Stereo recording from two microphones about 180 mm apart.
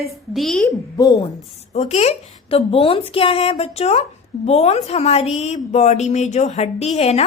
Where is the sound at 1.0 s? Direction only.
20° left (ahead or behind).